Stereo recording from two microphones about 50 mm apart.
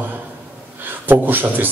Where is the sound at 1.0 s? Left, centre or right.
Right.